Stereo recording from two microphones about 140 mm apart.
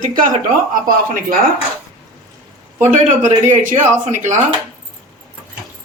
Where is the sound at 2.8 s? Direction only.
60° right (ahead or behind).